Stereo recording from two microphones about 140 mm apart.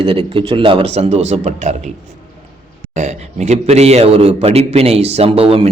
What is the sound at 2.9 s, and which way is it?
A man's voice, 55° right (ahead or behind).